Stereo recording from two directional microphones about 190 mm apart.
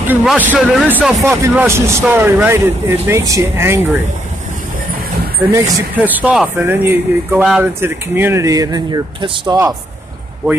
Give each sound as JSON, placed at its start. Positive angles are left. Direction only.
{"t": 0.1, "sound": "speech", "side_deg": -5}
{"t": 5.5, "sound": "speech", "side_deg": -10}